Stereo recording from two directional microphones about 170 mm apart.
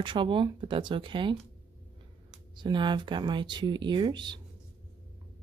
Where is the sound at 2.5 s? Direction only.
25° right (ahead or behind).